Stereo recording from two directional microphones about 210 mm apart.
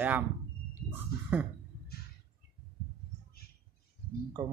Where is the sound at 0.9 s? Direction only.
5° right (ahead or behind).